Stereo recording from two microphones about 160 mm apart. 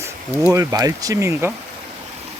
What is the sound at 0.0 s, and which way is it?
Speech, 15° right (ahead or behind).